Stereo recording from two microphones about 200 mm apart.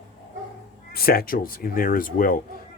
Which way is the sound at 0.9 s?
50° left (ahead or behind).